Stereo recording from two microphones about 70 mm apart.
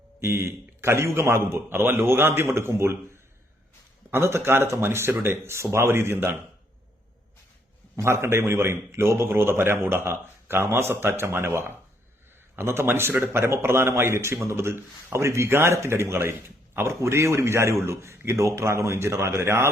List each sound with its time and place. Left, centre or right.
0.2 s a man's voice: right
4.1 s a man's voice: right
7.9 s a man's voice: right